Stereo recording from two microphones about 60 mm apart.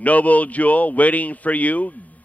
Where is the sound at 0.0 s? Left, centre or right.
Left.